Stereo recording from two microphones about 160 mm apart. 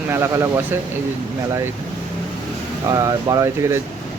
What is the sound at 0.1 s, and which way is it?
Speech, 15° right (ahead or behind).